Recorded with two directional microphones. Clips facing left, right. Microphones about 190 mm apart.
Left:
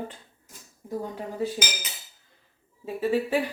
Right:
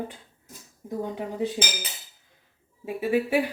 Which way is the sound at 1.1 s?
15° right (ahead or behind).